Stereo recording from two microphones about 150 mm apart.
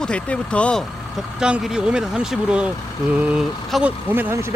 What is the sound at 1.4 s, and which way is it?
Speech, 5° right (ahead or behind).